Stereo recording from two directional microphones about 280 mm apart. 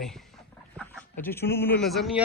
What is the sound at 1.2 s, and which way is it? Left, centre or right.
Speech, centre.